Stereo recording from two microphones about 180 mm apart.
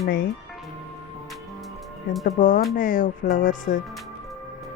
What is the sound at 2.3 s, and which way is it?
A woman's voice, 45° left (ahead or behind).